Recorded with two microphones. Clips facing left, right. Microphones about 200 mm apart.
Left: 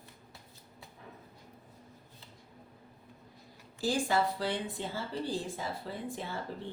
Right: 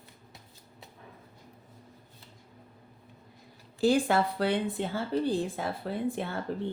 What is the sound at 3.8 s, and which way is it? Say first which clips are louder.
A woman's voice: right 6 dB; 60° right (ahead or behind).